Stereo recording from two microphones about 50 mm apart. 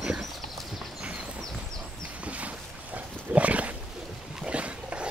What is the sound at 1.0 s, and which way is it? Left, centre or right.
Horse, centre.